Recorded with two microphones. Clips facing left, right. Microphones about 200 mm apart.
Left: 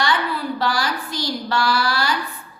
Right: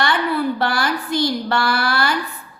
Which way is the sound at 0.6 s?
55° right (ahead or behind).